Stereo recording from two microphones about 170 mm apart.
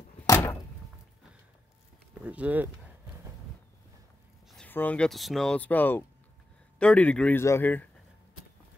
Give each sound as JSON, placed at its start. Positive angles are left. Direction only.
{"t": 0.3, "sound": "door", "side_deg": 15}
{"t": 2.2, "sound": "speech", "side_deg": -10}
{"t": 4.5, "sound": "speech", "side_deg": 5}